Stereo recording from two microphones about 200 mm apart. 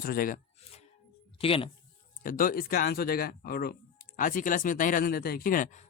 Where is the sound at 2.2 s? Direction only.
45° left (ahead or behind).